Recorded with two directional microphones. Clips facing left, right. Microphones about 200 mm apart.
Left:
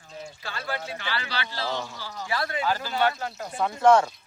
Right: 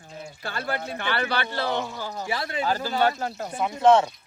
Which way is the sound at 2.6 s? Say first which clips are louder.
Right 3 dB; 40° right (ahead or behind).